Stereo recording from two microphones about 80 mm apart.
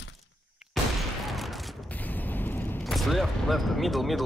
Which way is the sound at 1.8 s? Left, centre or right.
Left.